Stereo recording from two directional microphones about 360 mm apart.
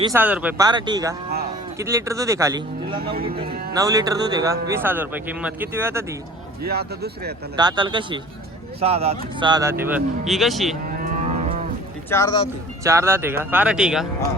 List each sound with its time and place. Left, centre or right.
0.0 s speech: centre
6.6 s speech: right
7.5 s speech: centre
10.9 s moo: right
12.1 s speech: centre
12.8 s speech: centre